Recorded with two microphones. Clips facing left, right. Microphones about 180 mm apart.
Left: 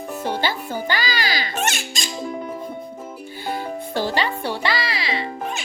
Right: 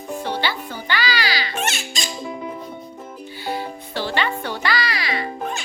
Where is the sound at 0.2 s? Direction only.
45° left (ahead or behind).